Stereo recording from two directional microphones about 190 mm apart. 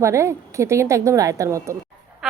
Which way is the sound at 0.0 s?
15° right (ahead or behind).